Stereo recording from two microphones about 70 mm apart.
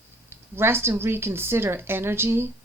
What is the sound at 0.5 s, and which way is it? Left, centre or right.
Speech, right.